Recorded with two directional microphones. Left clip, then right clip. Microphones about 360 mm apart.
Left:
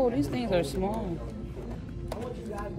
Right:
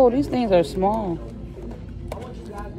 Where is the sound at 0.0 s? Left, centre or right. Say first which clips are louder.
Right 10 dB; centre.